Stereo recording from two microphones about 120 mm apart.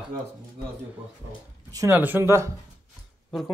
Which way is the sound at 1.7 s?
20° right (ahead or behind).